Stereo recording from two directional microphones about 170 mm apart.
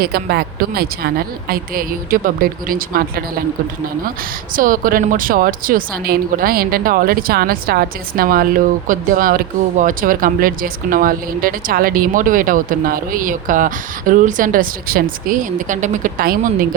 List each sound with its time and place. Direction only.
0.0 s a woman's voice: 65° right (ahead or behind)
4.5 s a woman's voice: 55° right (ahead or behind)